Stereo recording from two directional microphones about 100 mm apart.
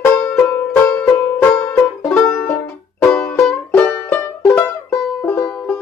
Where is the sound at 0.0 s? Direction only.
20° left (ahead or behind).